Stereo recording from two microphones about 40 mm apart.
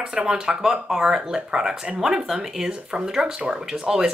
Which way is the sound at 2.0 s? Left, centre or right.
Centre.